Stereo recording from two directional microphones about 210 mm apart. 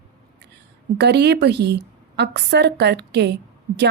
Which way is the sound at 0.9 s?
55° right (ahead or behind).